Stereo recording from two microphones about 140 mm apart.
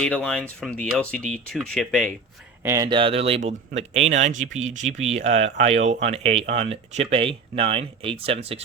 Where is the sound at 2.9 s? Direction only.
40° right (ahead or behind).